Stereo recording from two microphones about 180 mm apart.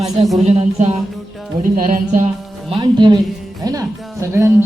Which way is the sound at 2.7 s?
25° right (ahead or behind).